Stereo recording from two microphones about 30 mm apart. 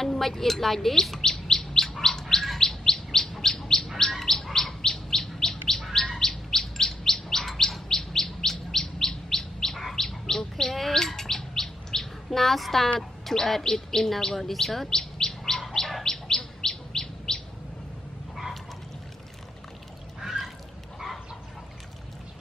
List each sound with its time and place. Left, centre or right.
0.0 s speech: centre
1.3 s chirp: centre
9.8 s bird: centre
10.0 s chirp: centre
12.3 s a woman's voice: centre
14.9 s chirp: centre
16.0 s bird: centre
16.6 s chirp: centre
20.2 s a sound: centre